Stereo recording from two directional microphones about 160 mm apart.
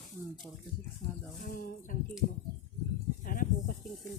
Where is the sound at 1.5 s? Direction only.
60° left (ahead or behind).